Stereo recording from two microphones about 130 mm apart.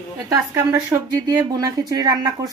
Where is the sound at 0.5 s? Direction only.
20° right (ahead or behind).